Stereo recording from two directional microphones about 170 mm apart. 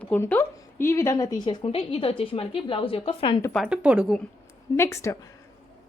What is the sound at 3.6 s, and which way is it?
Speech, 5° right (ahead or behind).